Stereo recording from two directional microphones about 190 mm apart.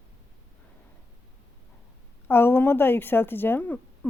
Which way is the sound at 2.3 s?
10° left (ahead or behind).